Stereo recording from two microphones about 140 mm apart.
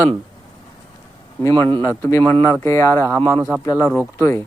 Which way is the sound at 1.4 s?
20° left (ahead or behind).